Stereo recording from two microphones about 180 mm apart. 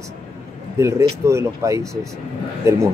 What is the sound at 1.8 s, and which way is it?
Speech, centre (ahead or behind).